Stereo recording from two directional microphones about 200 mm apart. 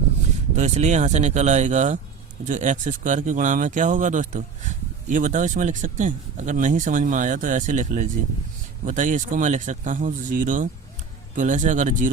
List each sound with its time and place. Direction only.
0.5 s speech: 35° right (ahead or behind)